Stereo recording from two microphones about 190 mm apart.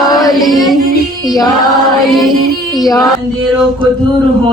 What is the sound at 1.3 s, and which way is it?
Chant, 20° left (ahead or behind).